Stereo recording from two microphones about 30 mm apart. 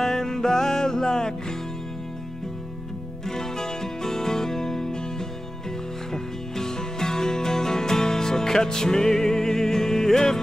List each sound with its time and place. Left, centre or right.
0.0 s music: centre
3.3 s music: centre
6.1 s music: centre